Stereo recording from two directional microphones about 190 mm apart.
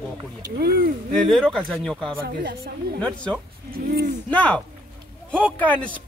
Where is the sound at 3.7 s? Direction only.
50° right (ahead or behind).